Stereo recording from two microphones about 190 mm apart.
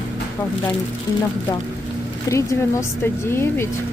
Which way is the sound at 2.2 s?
15° left (ahead or behind).